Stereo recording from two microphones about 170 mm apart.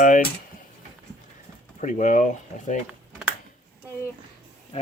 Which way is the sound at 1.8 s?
45° left (ahead or behind).